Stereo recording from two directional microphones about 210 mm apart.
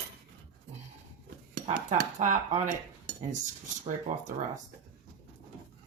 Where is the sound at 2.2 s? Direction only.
35° right (ahead or behind).